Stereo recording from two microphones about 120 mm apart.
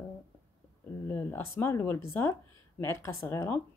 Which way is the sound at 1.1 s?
20° left (ahead or behind).